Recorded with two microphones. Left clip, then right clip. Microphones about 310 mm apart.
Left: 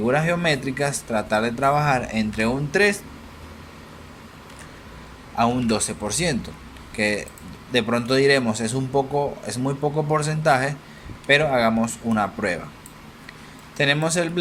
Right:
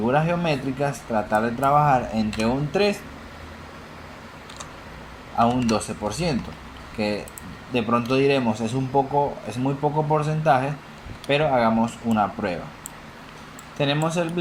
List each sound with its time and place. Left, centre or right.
0.0 s a man's voice: left
5.4 s a man's voice: left
13.7 s a man's voice: left